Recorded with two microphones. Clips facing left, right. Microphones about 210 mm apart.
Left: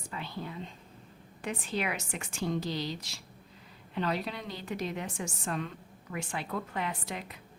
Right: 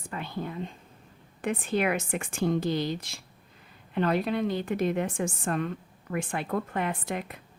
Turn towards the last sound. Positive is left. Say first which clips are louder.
# right 6 dB
turn(degrees=-55)  # may be behind; listen again after turning